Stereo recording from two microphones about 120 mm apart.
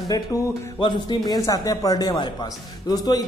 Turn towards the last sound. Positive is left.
turn(degrees=30)  # may be behind; listen again after turning